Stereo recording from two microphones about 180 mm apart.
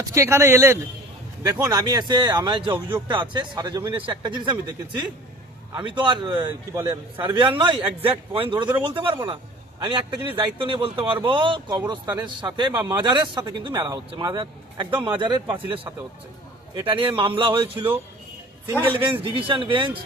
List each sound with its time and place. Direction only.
0.1 s a man's voice: 15° right (ahead or behind)
5.7 s speech: 25° right (ahead or behind)
16.8 s speech: 30° right (ahead or behind)
19.4 s speech: 30° right (ahead or behind)